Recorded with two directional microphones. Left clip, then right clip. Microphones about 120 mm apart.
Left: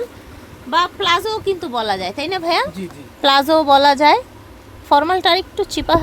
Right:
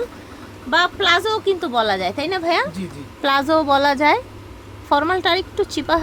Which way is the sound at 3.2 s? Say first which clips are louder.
Left 4 dB; 25° left (ahead or behind).